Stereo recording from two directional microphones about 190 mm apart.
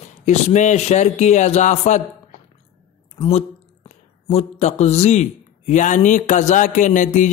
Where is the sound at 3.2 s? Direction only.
35° left (ahead or behind).